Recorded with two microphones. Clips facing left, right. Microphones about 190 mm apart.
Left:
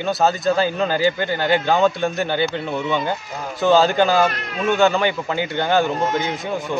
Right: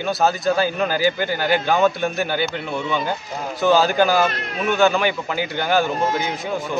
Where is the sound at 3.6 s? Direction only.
5° right (ahead or behind).